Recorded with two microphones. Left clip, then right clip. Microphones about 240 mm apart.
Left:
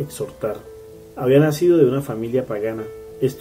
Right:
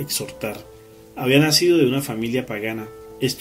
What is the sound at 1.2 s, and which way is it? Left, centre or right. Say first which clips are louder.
Speech: left 1 dB; right.